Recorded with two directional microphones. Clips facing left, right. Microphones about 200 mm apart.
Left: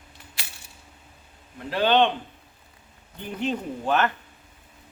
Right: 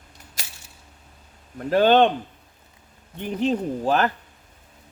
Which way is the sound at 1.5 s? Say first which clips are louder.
Right 4 dB; 45° right (ahead or behind).